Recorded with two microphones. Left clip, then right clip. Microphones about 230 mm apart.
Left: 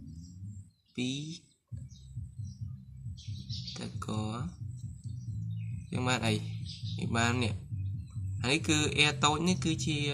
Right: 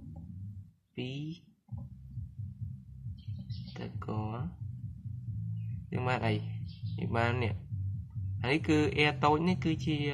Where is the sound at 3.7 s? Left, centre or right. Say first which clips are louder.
Right 2 dB; right.